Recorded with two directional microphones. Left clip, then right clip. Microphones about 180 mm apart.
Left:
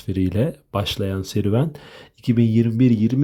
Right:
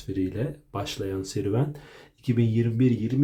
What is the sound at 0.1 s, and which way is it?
Speech, 45° left (ahead or behind).